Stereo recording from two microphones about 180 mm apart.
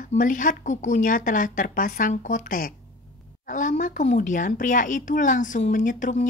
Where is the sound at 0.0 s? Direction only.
45° left (ahead or behind).